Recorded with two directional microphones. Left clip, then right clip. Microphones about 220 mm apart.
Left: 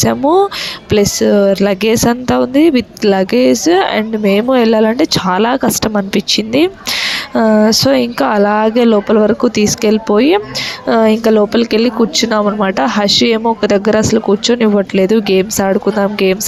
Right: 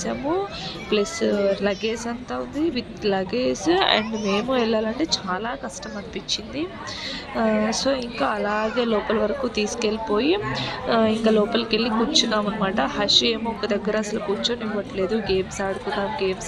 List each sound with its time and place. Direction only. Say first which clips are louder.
0.0 s speech: left 15 dB; 40° left (ahead or behind)